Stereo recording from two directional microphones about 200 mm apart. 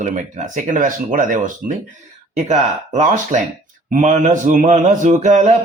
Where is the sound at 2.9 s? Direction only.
40° right (ahead or behind).